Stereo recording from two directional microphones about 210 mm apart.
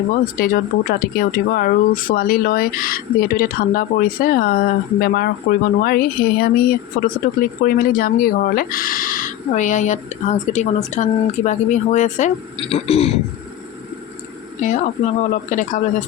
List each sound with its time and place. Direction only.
0.3 s speech: 45° left (ahead or behind)
14.6 s speech: 35° left (ahead or behind)